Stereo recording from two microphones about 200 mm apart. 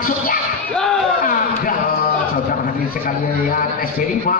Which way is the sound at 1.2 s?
45° left (ahead or behind).